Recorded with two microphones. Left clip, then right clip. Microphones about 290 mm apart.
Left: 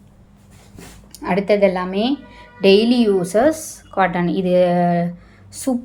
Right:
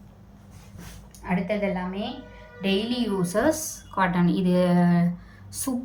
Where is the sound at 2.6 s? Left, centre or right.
Centre.